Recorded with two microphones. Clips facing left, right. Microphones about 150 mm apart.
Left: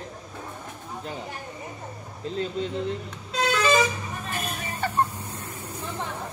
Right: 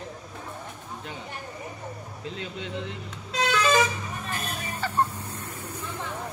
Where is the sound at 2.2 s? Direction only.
40° left (ahead or behind).